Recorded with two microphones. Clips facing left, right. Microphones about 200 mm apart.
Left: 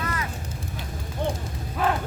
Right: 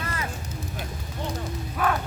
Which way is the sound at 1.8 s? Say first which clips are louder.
Left 1 dB; 25° left (ahead or behind).